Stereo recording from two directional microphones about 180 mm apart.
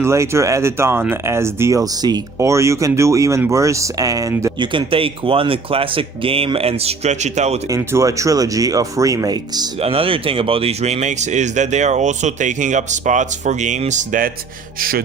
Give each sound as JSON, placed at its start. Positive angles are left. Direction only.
{"t": 0.0, "sound": "speech", "side_deg": -15}
{"t": 4.6, "sound": "speech", "side_deg": -30}
{"t": 7.7, "sound": "speech", "side_deg": -15}
{"t": 14.8, "sound": "speech", "side_deg": -55}